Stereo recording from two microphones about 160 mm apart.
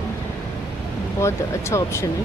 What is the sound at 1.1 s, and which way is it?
Speech, 15° left (ahead or behind).